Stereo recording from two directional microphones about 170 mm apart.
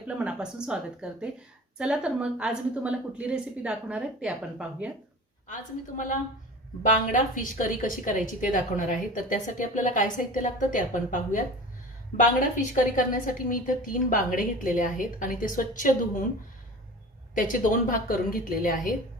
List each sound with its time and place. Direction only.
0.1 s a woman's voice: 5° right (ahead or behind)
7.1 s a woman's voice: 50° left (ahead or behind)
17.3 s a woman's voice: 50° left (ahead or behind)